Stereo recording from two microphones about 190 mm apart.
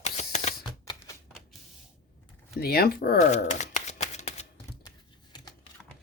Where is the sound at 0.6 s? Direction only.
20° left (ahead or behind).